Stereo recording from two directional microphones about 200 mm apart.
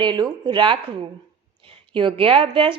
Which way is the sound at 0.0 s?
25° right (ahead or behind).